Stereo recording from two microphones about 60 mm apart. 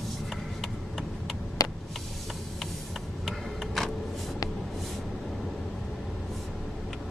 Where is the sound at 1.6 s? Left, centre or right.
Left.